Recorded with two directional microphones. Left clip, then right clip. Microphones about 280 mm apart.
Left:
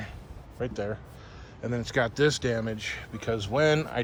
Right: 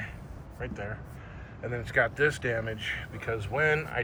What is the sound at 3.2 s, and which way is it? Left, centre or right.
Speech, left.